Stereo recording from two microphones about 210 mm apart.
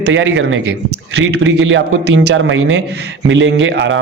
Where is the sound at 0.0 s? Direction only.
60° right (ahead or behind).